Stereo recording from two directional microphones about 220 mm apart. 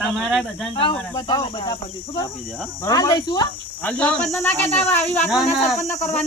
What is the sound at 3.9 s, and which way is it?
Speech, 5° left (ahead or behind).